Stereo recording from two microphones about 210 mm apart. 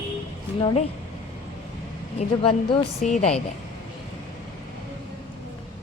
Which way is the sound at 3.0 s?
35° left (ahead or behind).